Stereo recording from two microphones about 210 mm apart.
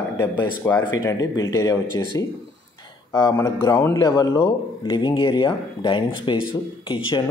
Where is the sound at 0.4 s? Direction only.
15° left (ahead or behind).